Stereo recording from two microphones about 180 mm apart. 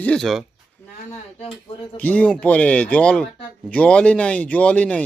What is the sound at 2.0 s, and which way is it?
Speech, 10° left (ahead or behind).